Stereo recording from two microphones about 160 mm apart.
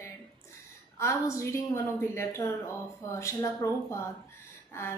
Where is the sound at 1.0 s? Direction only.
20° left (ahead or behind).